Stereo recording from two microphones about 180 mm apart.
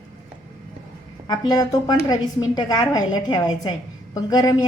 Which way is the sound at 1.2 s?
20° left (ahead or behind).